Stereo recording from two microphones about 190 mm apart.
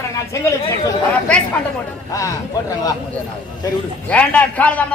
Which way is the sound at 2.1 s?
15° left (ahead or behind).